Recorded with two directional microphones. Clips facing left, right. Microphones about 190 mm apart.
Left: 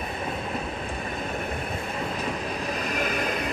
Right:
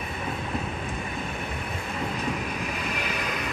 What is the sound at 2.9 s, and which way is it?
Vehicle, 45° left (ahead or behind).